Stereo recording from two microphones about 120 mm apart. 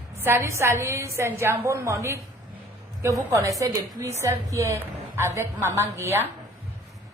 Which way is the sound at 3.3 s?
25° right (ahead or behind).